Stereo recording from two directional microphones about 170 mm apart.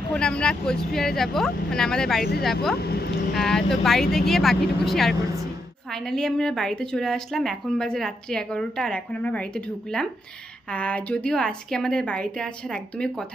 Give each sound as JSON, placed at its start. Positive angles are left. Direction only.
{"t": 0.1, "sound": "a woman's voice", "side_deg": 5}
{"t": 2.8, "sound": "music", "side_deg": 70}
{"t": 3.3, "sound": "a woman's voice", "side_deg": 0}